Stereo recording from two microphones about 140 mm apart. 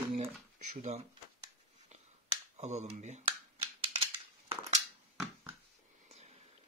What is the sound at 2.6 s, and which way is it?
Speech, 55° right (ahead or behind).